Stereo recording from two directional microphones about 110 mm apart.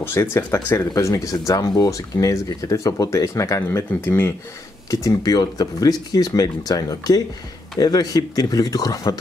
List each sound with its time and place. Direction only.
0.0 s speech: 25° left (ahead or behind)
4.9 s speech: 35° left (ahead or behind)